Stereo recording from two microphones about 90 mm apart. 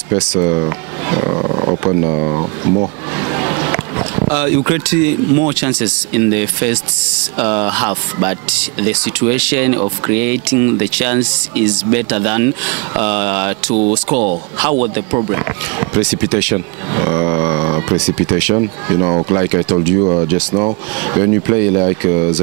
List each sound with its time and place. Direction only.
0.1 s speech: 15° right (ahead or behind)